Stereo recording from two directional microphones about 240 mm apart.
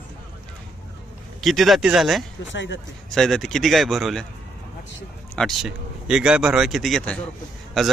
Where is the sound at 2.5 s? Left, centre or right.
Left.